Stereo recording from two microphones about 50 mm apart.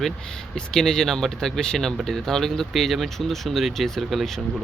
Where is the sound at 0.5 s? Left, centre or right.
Centre.